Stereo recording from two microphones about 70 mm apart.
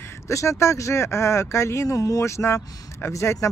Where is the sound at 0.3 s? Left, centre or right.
Left.